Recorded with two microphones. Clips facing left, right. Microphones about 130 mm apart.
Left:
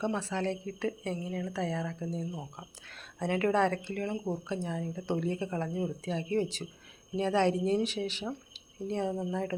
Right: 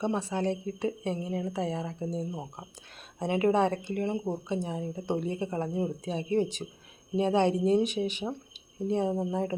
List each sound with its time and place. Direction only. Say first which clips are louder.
0.0 s a woman's voice: right 2 dB; 15° right (ahead or behind)